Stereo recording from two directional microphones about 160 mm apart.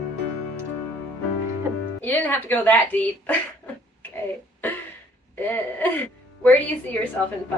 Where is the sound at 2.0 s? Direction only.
10° left (ahead or behind).